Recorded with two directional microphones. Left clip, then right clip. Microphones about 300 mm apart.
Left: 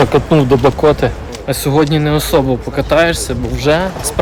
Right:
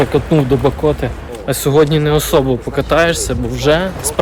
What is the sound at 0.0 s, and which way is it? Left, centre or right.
Speech, centre.